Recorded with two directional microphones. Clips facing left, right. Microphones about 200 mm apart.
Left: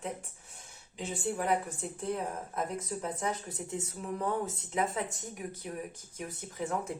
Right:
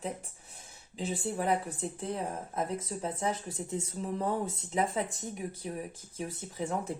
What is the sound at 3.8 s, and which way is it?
Speech, 30° right (ahead or behind).